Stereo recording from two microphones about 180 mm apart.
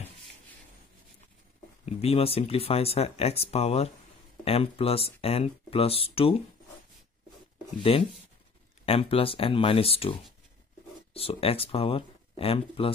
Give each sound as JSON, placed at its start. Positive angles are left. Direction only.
{"t": 1.9, "sound": "speech", "side_deg": 35}
{"t": 7.9, "sound": "speech", "side_deg": 35}
{"t": 11.1, "sound": "speech", "side_deg": 30}